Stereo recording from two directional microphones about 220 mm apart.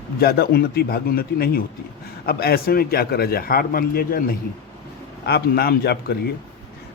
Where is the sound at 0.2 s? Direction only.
45° left (ahead or behind).